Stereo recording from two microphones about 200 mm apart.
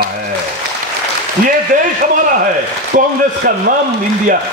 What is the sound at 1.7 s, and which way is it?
Speech, 40° right (ahead or behind).